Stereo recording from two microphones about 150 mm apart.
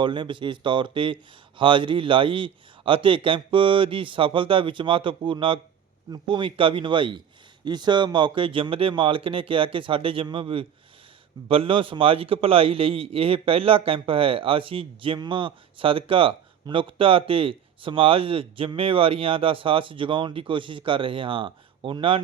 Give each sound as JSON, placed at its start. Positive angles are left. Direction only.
{"t": 0.0, "sound": "a man's voice", "side_deg": -30}